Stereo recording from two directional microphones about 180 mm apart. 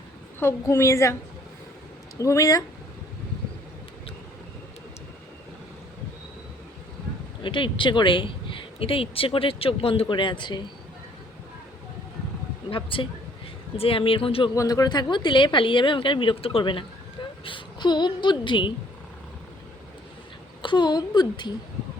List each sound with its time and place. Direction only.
0.3 s a woman's voice: 15° left (ahead or behind)
2.1 s a woman's voice: 15° left (ahead or behind)
7.4 s speech: 25° left (ahead or behind)
12.7 s speech: 30° left (ahead or behind)
14.5 s a woman's voice: 20° left (ahead or behind)
20.6 s speech: 25° left (ahead or behind)